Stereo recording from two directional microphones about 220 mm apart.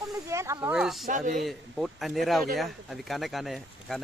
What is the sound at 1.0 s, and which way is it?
Speech, 35° right (ahead or behind).